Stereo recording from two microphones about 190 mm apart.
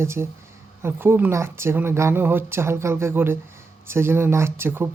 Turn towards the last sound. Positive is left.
turn(degrees=-10)  # may be behind; listen again after turning